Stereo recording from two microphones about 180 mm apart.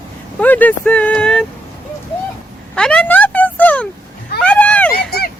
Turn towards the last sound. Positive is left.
turn(degrees=10)  # may be behind; listen again after turning